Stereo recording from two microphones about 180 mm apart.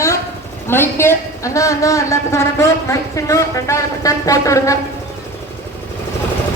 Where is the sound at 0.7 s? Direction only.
15° left (ahead or behind).